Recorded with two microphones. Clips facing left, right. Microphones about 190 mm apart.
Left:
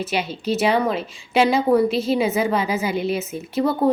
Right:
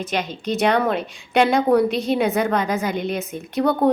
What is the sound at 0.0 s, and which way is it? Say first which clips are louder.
A woman's voice: left 1 dB; 5° left (ahead or behind).